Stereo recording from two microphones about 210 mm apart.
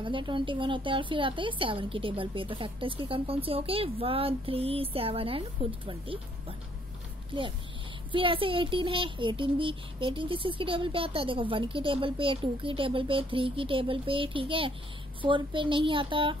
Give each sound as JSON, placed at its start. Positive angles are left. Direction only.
{"t": 0.0, "sound": "a child's voice", "side_deg": -25}
{"t": 8.1, "sound": "a child's voice", "side_deg": -25}